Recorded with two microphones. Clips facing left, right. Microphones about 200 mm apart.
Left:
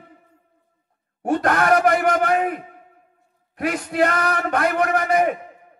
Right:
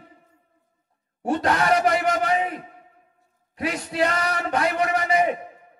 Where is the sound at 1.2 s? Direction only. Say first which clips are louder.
Left 3 dB; 55° left (ahead or behind).